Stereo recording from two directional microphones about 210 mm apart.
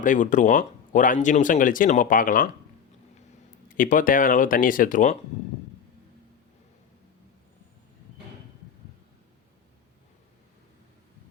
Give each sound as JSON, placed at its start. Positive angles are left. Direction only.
{"t": 0.0, "sound": "speech", "side_deg": 40}
{"t": 3.7, "sound": "speech", "side_deg": 40}